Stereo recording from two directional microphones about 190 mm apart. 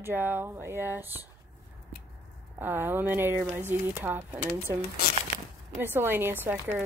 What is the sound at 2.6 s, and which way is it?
Speech, 10° right (ahead or behind).